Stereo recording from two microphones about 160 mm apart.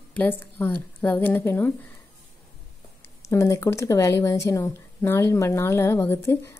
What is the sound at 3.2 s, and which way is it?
Speech, 20° left (ahead or behind).